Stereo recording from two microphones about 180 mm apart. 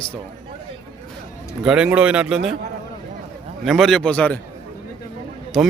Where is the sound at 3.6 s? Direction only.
Centre (ahead or behind).